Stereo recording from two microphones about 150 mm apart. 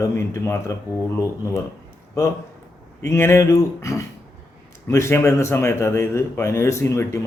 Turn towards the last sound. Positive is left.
turn(degrees=20)  # may be behind; listen again after turning